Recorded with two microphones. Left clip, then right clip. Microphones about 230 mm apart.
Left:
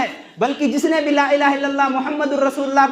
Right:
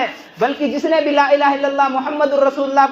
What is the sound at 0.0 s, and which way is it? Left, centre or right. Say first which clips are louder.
A man's voice: right 2 dB; left.